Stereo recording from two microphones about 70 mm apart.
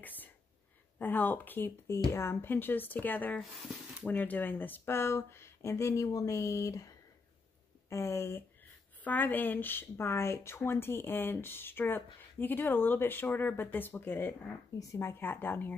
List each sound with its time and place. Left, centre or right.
0.0 s a sound: left
0.9 s speech: left
1.9 s speech: left
3.4 s speech: centre
4.1 s speech: left
7.9 s speech: left
9.0 s speech: left